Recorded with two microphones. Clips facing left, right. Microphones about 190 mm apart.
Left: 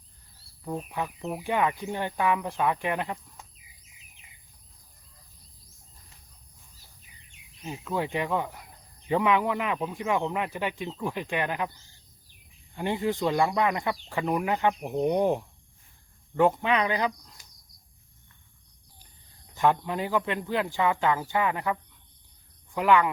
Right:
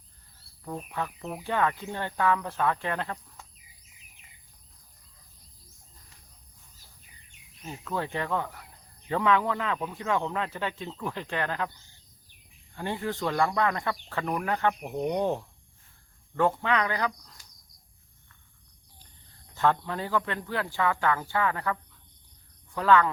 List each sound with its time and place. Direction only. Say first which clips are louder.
0.6 s speech: left 2 dB; 10° left (ahead or behind)
7.6 s speech: left 2 dB; 15° left (ahead or behind)
12.7 s speech: left 4 dB; 15° left (ahead or behind)
19.5 s speech: left 2 dB; 15° left (ahead or behind)